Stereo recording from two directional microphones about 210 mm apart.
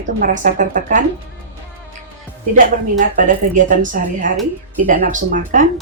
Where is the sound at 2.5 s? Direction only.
40° right (ahead or behind).